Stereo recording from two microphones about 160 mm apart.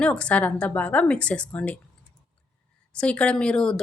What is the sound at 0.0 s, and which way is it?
A woman's voice, 5° left (ahead or behind).